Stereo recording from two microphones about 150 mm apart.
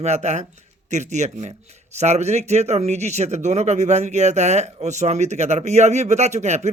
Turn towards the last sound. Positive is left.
turn(degrees=-50)  # may be behind; listen again after turning